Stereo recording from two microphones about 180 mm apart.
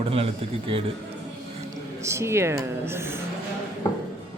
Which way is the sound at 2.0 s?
15° right (ahead or behind).